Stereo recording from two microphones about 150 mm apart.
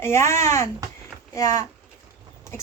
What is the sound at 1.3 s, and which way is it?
Speech, 20° left (ahead or behind).